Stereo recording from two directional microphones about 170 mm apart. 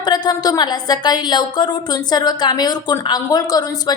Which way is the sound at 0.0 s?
25° left (ahead or behind).